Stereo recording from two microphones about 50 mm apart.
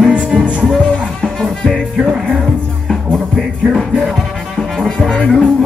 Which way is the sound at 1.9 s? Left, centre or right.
Centre.